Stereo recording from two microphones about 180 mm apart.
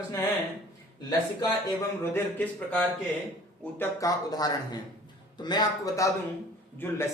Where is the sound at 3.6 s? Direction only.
10° left (ahead or behind).